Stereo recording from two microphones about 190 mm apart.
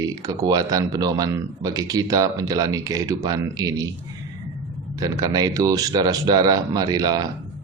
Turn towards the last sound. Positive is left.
turn(degrees=-20)  # may be behind; listen again after turning